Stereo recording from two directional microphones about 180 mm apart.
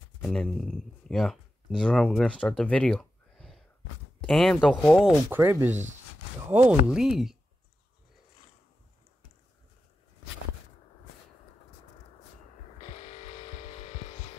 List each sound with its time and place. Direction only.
0.2 s speech: 5° left (ahead or behind)
5.3 s speech: 10° right (ahead or behind)
5.7 s speech: 40° right (ahead or behind)
6.5 s speech: 5° right (ahead or behind)
12.9 s vehicle: 35° left (ahead or behind)